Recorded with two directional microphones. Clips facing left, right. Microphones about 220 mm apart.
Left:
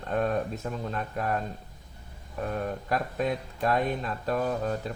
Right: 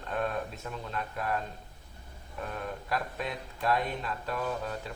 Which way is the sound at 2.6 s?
45° left (ahead or behind).